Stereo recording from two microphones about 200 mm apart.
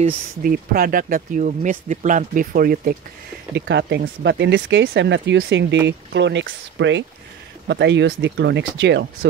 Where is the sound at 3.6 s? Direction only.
60° right (ahead or behind).